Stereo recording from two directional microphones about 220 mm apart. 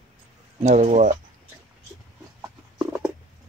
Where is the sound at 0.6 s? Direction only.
30° right (ahead or behind).